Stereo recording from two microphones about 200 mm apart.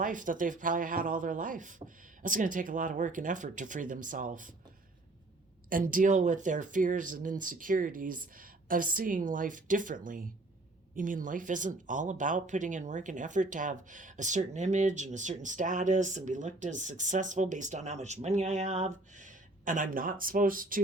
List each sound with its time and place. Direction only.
0.0 s speech: 40° right (ahead or behind)
5.6 s speech: 45° right (ahead or behind)